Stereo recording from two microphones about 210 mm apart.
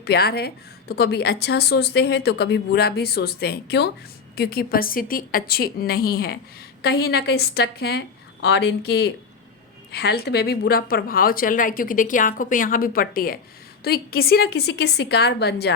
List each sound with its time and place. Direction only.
0.0 s a woman's voice: 50° left (ahead or behind)